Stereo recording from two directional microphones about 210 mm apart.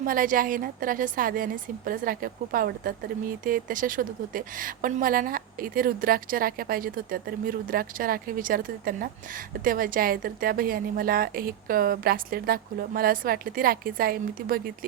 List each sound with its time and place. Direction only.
0.0 s a woman's voice: 40° right (ahead or behind)